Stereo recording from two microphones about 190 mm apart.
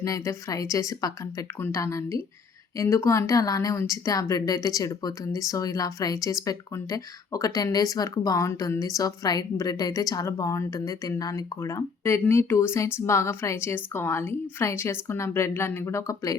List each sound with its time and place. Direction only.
0.0 s a woman's voice: 15° left (ahead or behind)